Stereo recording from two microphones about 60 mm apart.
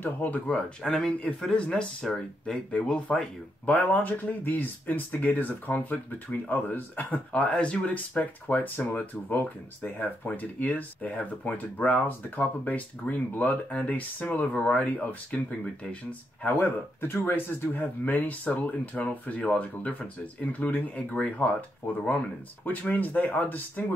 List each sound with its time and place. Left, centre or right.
0.0 s speech: left
0.5 s speech: centre
1.0 s speech: centre
16.4 s speech: left